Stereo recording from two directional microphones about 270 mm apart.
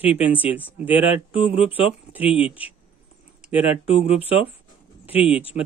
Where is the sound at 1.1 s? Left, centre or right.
Centre.